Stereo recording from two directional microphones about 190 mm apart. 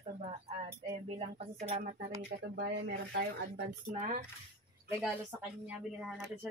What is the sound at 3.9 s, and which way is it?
Speech, 35° right (ahead or behind).